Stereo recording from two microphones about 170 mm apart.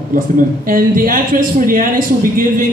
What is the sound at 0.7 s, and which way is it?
A man's voice, 55° right (ahead or behind).